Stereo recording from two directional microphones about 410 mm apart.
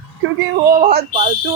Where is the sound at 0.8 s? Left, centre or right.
Centre.